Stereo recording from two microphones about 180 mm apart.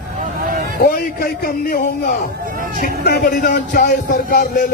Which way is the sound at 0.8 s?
55° left (ahead or behind).